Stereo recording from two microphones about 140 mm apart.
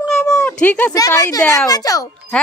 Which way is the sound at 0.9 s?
25° left (ahead or behind).